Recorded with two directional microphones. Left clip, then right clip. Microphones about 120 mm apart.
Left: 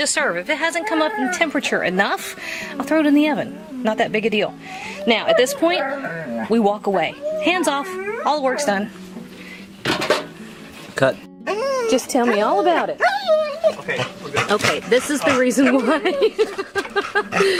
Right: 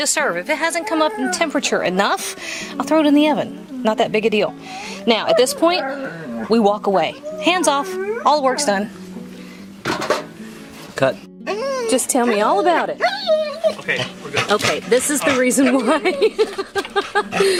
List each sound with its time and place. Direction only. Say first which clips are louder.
0.0 s speech: right 1 dB; 20° right (ahead or behind)
9.8 s dishes: left 1 dB; 5° left (ahead or behind)
10.9 s music: even; 5° left (ahead or behind)
12.1 s a woman's voice: right 2 dB; 20° right (ahead or behind)
13.0 s dog: left 1 dB; 10° left (ahead or behind)
14.0 s a sound: even; 5° left (ahead or behind)
14.6 s speech: even; 10° left (ahead or behind)
15.6 s speech: right 1 dB; 5° right (ahead or behind)
16.6 s a sound: right 1 dB; 15° right (ahead or behind)
17.0 s speech: right 1 dB; centre (ahead or behind)